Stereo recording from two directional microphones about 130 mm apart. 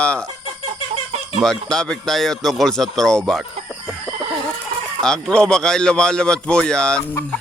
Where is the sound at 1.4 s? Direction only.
5° left (ahead or behind).